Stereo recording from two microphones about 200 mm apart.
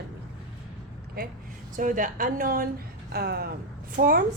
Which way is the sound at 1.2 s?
50° right (ahead or behind).